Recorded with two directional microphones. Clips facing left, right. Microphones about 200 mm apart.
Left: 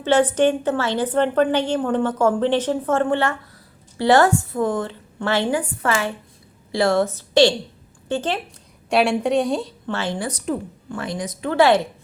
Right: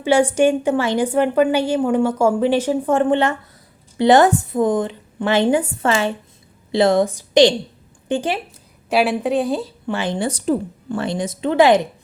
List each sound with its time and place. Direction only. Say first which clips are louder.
0.0 s a woman's voice: right 2 dB; 10° right (ahead or behind)
8.9 s a woman's voice: right 1 dB; centre (ahead or behind)
9.8 s a woman's voice: right 4 dB; 15° right (ahead or behind)